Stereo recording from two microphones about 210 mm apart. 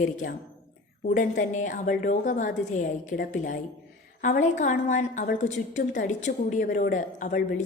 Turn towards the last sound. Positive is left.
turn(degrees=40)  # may be behind; listen again after turning